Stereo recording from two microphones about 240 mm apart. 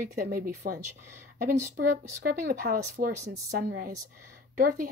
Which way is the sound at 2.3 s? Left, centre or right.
Right.